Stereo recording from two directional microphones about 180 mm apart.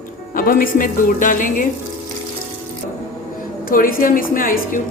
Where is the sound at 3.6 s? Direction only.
50° left (ahead or behind).